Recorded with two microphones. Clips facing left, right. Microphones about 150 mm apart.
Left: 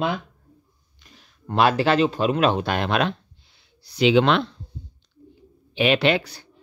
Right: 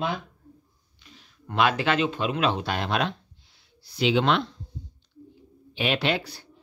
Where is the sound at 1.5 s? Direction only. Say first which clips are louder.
Left 4 dB; 35° left (ahead or behind); by 4.6 s 70° left (ahead or behind).